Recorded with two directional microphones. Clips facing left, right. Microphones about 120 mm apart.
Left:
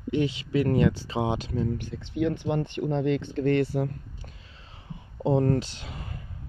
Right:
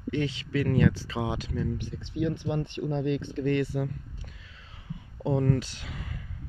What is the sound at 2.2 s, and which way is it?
Speech, 60° left (ahead or behind).